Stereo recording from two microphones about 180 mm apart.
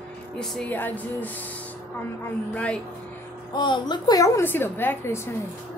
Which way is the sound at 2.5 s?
5° left (ahead or behind).